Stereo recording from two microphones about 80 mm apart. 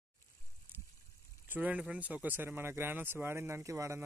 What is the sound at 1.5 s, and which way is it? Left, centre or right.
Speech, centre.